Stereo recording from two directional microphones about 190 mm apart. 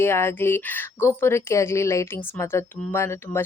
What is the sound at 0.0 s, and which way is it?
Speech, 10° left (ahead or behind).